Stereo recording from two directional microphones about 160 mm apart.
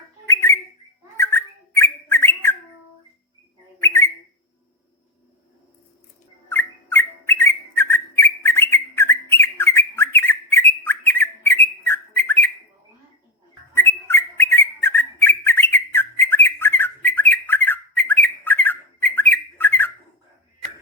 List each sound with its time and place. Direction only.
0.3 s bird: 15° left (ahead or behind)
3.8 s bird: 15° left (ahead or behind)
6.5 s bird: 15° left (ahead or behind)
13.7 s bird: 15° left (ahead or behind)